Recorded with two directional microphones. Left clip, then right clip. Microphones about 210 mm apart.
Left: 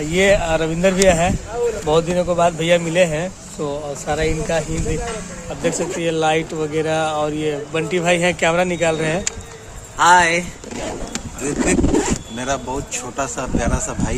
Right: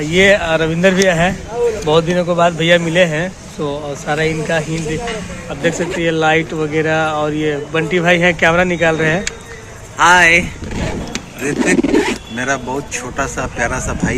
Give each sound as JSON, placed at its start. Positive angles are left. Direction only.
{"t": 0.0, "sound": "speech", "side_deg": 5}
{"t": 10.0, "sound": "speech", "side_deg": 20}
{"t": 11.9, "sound": "a sound", "side_deg": 30}
{"t": 12.4, "sound": "a man's voice", "side_deg": 15}